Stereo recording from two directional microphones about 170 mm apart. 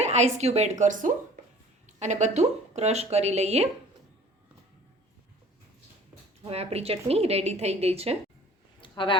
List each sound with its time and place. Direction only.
0.0 s a woman's voice: 40° right (ahead or behind)
6.4 s a woman's voice: 35° right (ahead or behind)
8.8 s a sound: 30° left (ahead or behind)